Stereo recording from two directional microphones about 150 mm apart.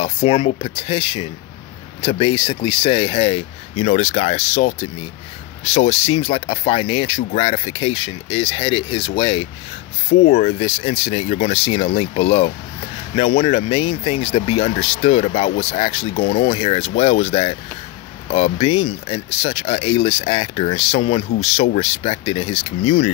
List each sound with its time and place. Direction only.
0.0 s speech: 40° left (ahead or behind)